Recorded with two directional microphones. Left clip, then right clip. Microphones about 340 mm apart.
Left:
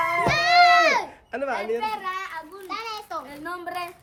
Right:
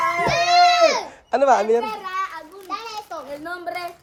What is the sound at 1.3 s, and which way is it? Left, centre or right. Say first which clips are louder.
Speech: right 11 dB; centre.